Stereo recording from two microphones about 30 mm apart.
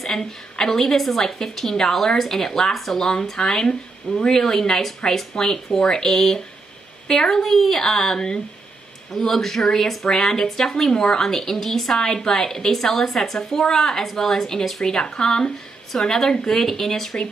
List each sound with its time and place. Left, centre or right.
0.0 s a woman's voice: centre
2.7 s speech: centre
3.0 s a woman's voice: centre
6.0 s a woman's voice: centre
14.8 s a woman's voice: left